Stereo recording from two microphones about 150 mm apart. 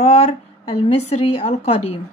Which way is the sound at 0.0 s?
45° left (ahead or behind).